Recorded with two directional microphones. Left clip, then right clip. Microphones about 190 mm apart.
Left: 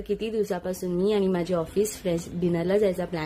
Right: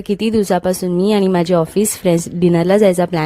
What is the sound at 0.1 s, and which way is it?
Speech, 45° right (ahead or behind).